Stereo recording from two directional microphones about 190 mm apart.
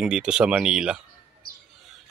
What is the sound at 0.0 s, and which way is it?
Speech, 5° right (ahead or behind).